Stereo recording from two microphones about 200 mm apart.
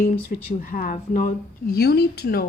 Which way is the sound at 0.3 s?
45° left (ahead or behind).